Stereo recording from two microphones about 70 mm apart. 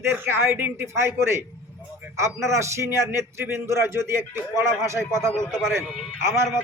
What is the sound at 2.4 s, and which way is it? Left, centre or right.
Speech, right.